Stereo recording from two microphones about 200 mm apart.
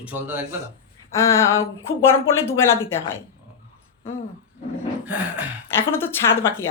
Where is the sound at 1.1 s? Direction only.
15° left (ahead or behind).